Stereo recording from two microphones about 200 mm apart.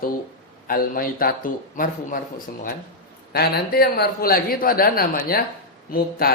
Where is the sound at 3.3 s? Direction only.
50° left (ahead or behind).